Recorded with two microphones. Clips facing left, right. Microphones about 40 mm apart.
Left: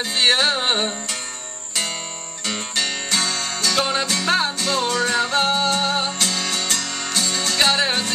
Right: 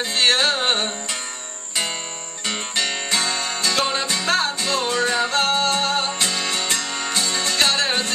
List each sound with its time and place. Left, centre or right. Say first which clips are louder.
0.2 s music: even; centre
2.4 s music: even; centre
6.1 s music: even; centre
7.5 s music: left 2 dB; centre